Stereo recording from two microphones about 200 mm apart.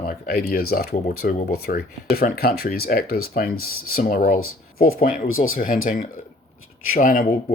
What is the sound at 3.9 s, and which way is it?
Speech, 45° left (ahead or behind).